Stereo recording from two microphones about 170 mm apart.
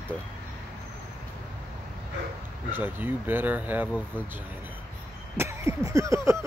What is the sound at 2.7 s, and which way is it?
Speech, 10° right (ahead or behind).